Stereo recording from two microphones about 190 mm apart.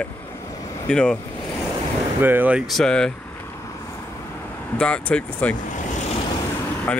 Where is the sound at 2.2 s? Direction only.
10° right (ahead or behind).